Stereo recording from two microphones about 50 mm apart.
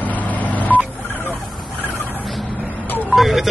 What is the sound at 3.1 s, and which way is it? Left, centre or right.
Speech, centre.